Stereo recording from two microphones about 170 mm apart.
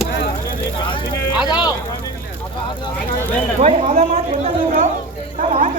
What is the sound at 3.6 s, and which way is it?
Speech, 40° right (ahead or behind).